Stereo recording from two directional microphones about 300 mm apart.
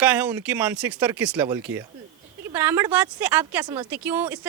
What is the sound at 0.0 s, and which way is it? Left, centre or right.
Speech, centre.